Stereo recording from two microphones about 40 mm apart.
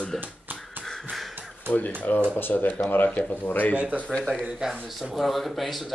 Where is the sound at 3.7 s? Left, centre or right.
Right.